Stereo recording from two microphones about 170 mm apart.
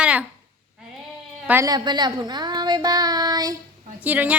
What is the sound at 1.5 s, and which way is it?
A woman's voice, 20° right (ahead or behind).